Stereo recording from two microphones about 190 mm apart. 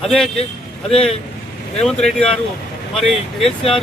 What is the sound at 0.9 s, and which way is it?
Speech, 30° left (ahead or behind).